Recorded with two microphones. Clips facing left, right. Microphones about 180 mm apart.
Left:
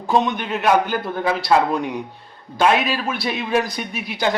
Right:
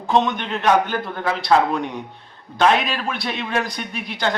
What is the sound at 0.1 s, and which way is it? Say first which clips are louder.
A man's voice: even; 5° left (ahead or behind).